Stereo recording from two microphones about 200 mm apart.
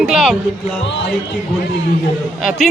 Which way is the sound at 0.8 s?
60° left (ahead or behind).